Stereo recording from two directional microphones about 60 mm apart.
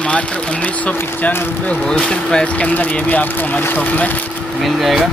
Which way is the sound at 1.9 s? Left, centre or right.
Centre.